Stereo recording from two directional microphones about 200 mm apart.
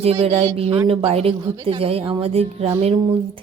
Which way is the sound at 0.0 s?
30° right (ahead or behind).